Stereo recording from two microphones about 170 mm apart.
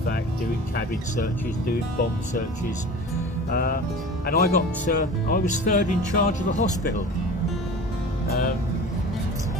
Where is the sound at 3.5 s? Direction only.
60° left (ahead or behind).